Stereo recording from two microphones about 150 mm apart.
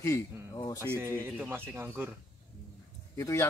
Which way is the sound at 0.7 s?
15° right (ahead or behind).